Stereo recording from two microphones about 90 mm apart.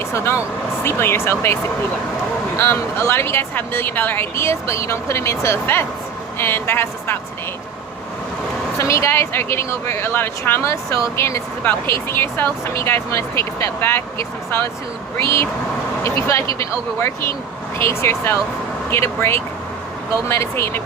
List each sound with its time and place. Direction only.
0.1 s speech: 30° left (ahead or behind)
2.6 s speech: 30° left (ahead or behind)
8.8 s speech: 35° left (ahead or behind)
11.6 s speech: 20° left (ahead or behind)
16.6 s speech: 30° left (ahead or behind)